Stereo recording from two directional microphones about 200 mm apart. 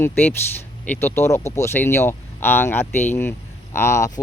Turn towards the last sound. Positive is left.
turn(degrees=15)  # may be behind; listen again after turning